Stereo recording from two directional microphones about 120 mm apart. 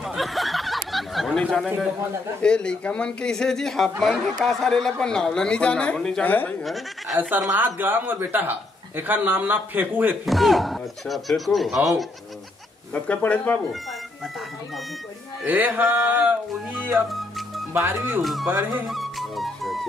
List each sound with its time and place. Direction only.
0.0 s a sound: centre (ahead or behind)
1.4 s speech: 5° left (ahead or behind)
6.6 s speech: centre (ahead or behind)
7.2 s speech: 15° right (ahead or behind)
10.2 s speech: centre (ahead or behind)
12.9 s speech: 10° left (ahead or behind)
15.4 s speech: 15° right (ahead or behind)
16.9 s music: centre (ahead or behind)
17.7 s speech: 15° right (ahead or behind)
18.2 s speech: centre (ahead or behind)
18.9 s music: centre (ahead or behind)